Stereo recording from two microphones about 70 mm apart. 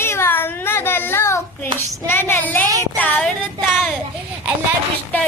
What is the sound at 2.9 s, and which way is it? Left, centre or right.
Child singing, left.